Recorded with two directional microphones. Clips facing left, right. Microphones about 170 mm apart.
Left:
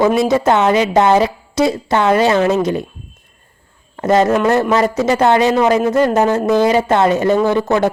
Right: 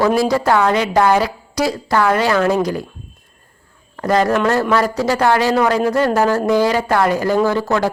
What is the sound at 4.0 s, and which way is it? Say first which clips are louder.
Speech: left 3 dB; 25° left (ahead or behind).